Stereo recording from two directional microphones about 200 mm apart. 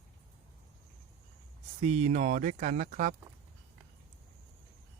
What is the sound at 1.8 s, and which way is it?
Speech, 35° right (ahead or behind).